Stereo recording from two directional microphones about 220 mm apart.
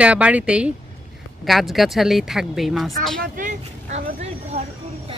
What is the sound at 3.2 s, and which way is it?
Speech, 35° right (ahead or behind).